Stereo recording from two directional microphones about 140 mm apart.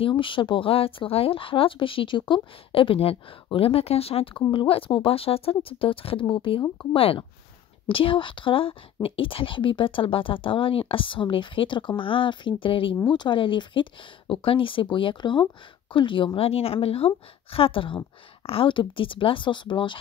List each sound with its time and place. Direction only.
0.0 s speech: 35° left (ahead or behind)